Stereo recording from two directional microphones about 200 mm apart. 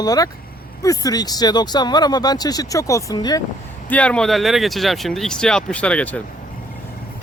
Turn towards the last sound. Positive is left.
turn(degrees=5)  # may be behind; listen again after turning